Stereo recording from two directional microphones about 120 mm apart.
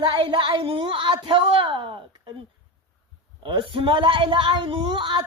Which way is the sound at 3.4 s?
45° right (ahead or behind).